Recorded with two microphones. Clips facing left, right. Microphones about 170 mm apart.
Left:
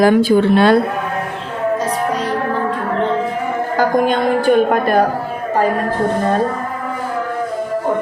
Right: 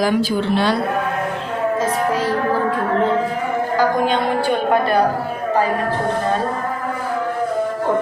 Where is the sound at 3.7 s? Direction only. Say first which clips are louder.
Left 3 dB; 50° left (ahead or behind).